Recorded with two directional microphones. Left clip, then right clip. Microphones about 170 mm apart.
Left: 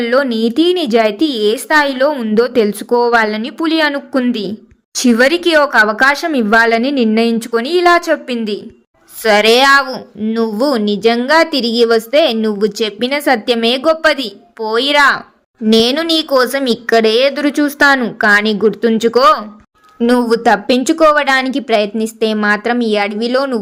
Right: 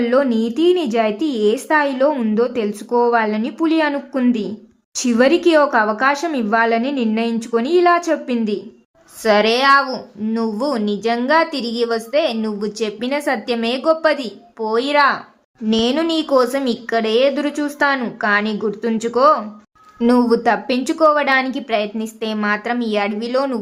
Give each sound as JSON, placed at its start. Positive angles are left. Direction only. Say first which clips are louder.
{"t": 0.0, "sound": "a woman's voice", "louder": "left 3 dB", "side_deg": 25}